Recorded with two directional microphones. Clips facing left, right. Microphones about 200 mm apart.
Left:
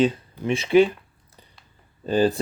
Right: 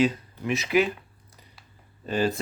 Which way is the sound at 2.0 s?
30° left (ahead or behind).